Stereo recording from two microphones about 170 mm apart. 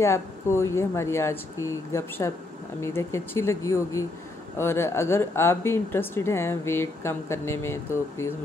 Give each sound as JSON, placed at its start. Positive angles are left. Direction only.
{"t": 0.0, "sound": "speech", "side_deg": 15}